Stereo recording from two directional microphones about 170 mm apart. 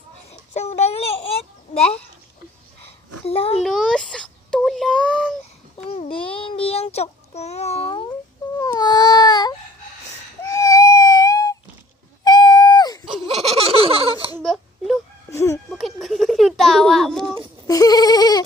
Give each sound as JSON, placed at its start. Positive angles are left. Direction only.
{"t": 0.3, "sound": "babbling", "side_deg": 40}
{"t": 3.2, "sound": "a child's voice", "side_deg": 35}
{"t": 3.6, "sound": "a sound", "side_deg": 0}
{"t": 5.7, "sound": "child singing", "side_deg": 40}
{"t": 8.5, "sound": "baby cry", "side_deg": 25}
{"t": 10.4, "sound": "a sound", "side_deg": 20}
{"t": 13.2, "sound": "baby laughter", "side_deg": -35}
{"t": 14.3, "sound": "baby cry", "side_deg": 0}
{"t": 15.3, "sound": "speech", "side_deg": 15}
{"t": 15.7, "sound": "a child's voice", "side_deg": 0}
{"t": 17.7, "sound": "goat", "side_deg": 20}